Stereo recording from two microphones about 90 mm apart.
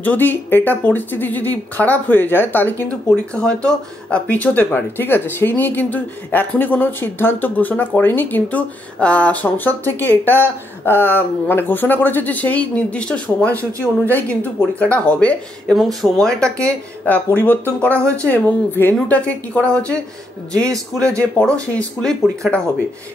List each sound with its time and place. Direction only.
0.0 s a woman's voice: 20° left (ahead or behind)
15.7 s speech: centre (ahead or behind)
16.4 s speech: 35° right (ahead or behind)
17.0 s speech: 20° left (ahead or behind)
17.8 s speech: 30° right (ahead or behind)
18.2 s a woman's voice: 20° left (ahead or behind)